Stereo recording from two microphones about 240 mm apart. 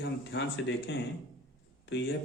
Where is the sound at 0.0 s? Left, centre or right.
Left.